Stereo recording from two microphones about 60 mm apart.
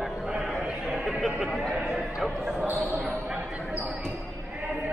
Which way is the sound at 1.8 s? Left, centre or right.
Centre.